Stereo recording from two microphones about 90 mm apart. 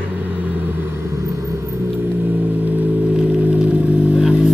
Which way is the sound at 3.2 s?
15° right (ahead or behind).